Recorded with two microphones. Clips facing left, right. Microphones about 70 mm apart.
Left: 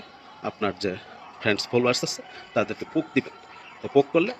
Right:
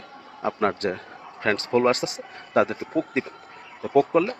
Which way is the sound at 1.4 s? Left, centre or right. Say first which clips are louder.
Right 1 dB; right.